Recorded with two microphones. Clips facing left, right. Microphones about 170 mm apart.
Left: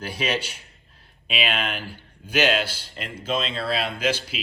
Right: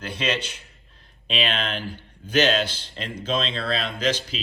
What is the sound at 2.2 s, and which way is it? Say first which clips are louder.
Speech: right 1 dB; 10° left (ahead or behind).